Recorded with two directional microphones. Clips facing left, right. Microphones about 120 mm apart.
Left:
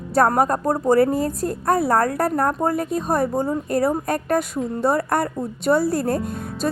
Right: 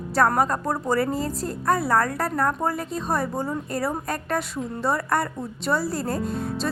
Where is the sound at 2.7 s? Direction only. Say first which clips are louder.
Left 5 dB; 50° left (ahead or behind).